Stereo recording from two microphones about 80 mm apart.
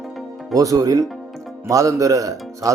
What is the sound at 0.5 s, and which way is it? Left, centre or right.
Speech, right.